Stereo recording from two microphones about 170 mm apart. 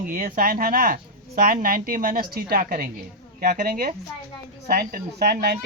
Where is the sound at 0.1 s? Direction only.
55° right (ahead or behind).